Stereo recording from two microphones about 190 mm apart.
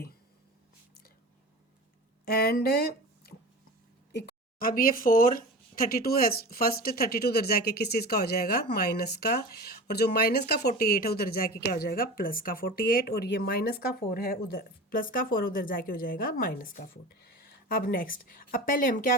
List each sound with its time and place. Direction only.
2.2 s speech: 55° left (ahead or behind)